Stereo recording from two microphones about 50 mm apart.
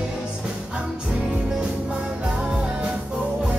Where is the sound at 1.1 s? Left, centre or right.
Right.